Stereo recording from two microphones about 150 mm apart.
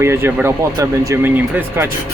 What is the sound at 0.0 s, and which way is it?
Speech, 15° right (ahead or behind).